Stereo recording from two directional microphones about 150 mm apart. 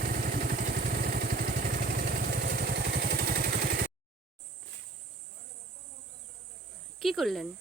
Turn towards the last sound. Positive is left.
turn(degrees=0)  # may be behind; listen again after turning